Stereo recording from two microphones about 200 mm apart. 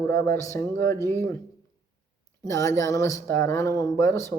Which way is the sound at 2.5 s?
15° left (ahead or behind).